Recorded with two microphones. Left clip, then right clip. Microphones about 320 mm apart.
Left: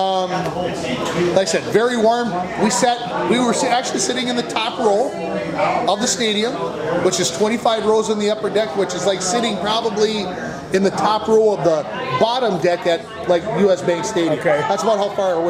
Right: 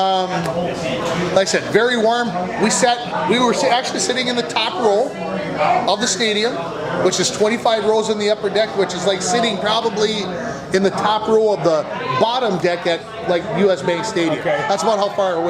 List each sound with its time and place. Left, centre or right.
0.0 s a man's voice: centre
1.4 s a man's voice: centre
3.3 s a man's voice: centre